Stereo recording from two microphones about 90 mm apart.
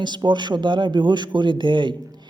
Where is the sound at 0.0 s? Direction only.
55° right (ahead or behind).